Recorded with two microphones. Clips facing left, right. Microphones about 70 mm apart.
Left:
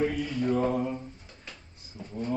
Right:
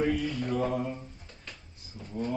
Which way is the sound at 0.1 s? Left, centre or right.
Centre.